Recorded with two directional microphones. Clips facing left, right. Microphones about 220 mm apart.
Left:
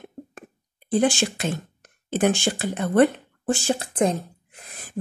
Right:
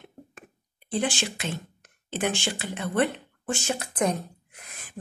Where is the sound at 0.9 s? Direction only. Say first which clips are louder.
Left 7 dB; 45° left (ahead or behind).